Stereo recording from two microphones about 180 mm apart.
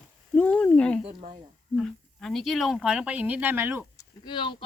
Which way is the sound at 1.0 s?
35° right (ahead or behind).